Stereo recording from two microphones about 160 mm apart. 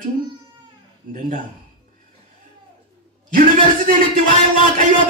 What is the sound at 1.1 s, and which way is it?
Speech, 55° right (ahead or behind).